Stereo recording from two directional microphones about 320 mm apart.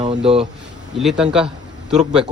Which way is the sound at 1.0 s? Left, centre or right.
Centre.